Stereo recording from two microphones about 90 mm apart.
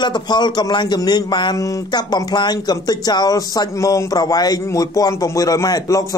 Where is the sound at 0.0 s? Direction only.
55° left (ahead or behind).